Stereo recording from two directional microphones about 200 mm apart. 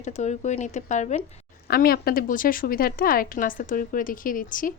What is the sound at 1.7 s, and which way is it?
A woman's voice, 50° left (ahead or behind).